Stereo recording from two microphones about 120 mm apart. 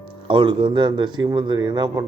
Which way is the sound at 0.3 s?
45° right (ahead or behind).